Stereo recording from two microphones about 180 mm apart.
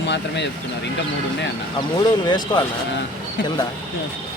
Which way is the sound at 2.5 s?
20° left (ahead or behind).